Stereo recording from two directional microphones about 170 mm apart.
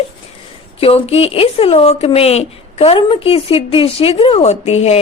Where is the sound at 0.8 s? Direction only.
35° left (ahead or behind).